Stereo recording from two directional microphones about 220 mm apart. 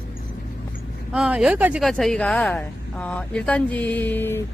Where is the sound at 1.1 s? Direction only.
5° right (ahead or behind).